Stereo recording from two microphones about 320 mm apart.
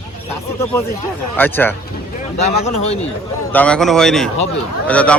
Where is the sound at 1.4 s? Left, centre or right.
Centre.